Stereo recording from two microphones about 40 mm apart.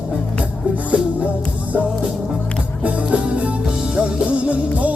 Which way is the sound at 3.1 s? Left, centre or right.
Right.